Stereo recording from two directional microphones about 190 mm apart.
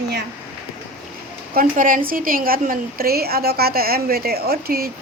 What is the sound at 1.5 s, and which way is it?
A woman's voice, 45° right (ahead or behind).